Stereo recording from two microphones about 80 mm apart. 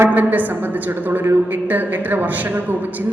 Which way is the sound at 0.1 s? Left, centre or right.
Right.